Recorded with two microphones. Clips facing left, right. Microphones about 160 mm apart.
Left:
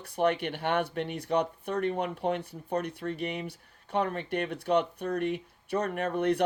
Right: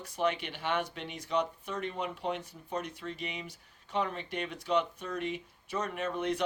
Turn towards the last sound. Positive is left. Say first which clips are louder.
# left 5 dB
turn(degrees=60)  # may be behind; listen again after turning